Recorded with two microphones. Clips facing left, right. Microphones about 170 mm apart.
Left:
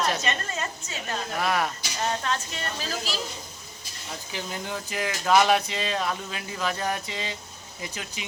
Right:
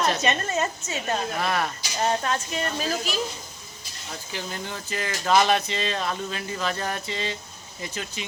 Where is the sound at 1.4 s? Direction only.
10° left (ahead or behind).